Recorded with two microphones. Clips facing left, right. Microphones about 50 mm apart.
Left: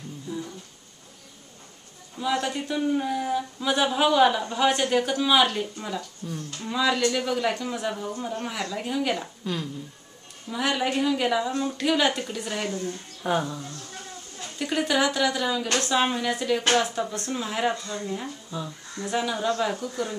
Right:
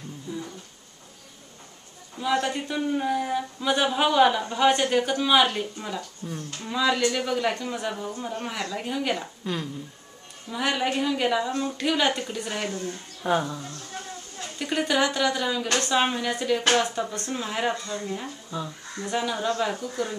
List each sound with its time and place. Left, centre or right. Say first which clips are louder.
0.3 s a sound: left 1 dB; centre
2.1 s speech: right 1 dB; centre
5.9 s speech: even; centre
6.6 s speech: even; centre
14.6 s speech: even; centre